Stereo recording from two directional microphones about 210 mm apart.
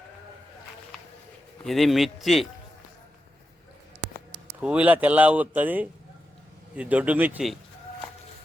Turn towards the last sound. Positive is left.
turn(degrees=-5)  # may be behind; listen again after turning